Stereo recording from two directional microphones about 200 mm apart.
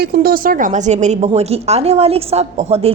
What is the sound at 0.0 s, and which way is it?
A woman's voice, 50° right (ahead or behind).